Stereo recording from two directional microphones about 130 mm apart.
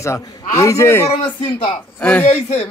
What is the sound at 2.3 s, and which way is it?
Speech, 50° left (ahead or behind).